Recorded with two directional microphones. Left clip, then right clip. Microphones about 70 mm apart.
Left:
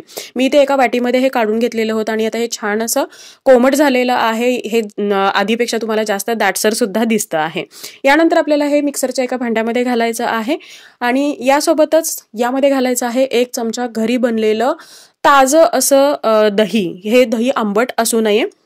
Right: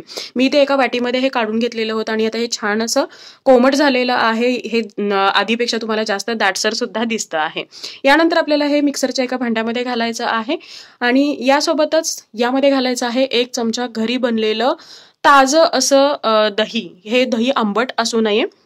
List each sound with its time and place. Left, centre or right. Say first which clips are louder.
0.3 s a woman's voice: left 2 dB; left
6.5 s speech: left 4 dB; left
7.3 s speech: left 2 dB; left
9.7 s a woman's voice: left 4 dB; left
11.0 s speech: even; left
17.7 s a woman's voice: left 2 dB; left